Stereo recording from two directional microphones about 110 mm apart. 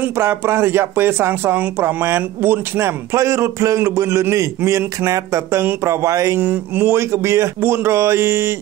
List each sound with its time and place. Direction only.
0.0 s speech: 20° right (ahead or behind)